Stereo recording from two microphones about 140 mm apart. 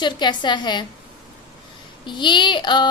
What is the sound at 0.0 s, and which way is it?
Speech, 30° left (ahead or behind).